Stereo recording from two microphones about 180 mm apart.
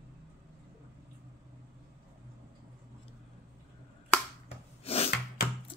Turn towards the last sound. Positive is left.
turn(degrees=35)  # may be behind; listen again after turning